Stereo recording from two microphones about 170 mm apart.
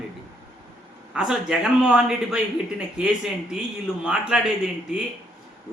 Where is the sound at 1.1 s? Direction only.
5° right (ahead or behind).